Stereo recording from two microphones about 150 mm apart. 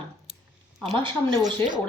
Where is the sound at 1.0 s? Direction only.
30° right (ahead or behind).